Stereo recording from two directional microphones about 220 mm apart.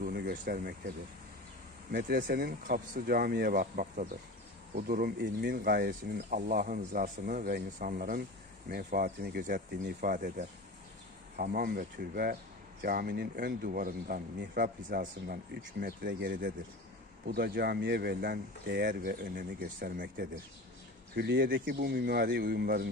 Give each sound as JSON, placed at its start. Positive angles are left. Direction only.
{"t": 0.0, "sound": "a sound", "side_deg": -40}
{"t": 1.9, "sound": "speech", "side_deg": -45}
{"t": 21.1, "sound": "speech", "side_deg": -50}